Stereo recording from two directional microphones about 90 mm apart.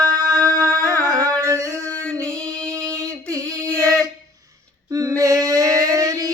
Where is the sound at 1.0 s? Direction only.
40° right (ahead or behind).